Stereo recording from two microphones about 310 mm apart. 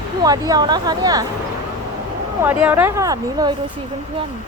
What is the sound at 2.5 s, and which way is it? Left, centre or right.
Speech, centre.